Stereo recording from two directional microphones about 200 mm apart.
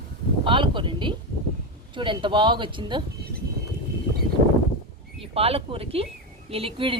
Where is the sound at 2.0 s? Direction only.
25° right (ahead or behind).